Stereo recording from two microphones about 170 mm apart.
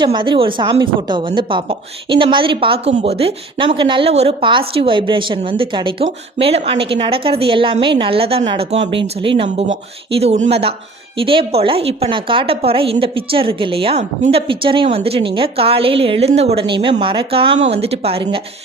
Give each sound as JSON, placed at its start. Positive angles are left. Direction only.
{"t": 0.0, "sound": "a woman's voice", "side_deg": -25}